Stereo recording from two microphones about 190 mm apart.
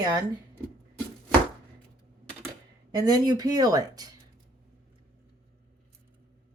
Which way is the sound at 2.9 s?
20° right (ahead or behind).